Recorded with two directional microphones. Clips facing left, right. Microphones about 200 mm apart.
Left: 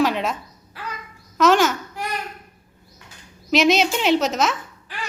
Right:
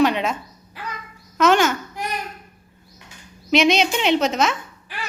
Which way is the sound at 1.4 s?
Centre (ahead or behind).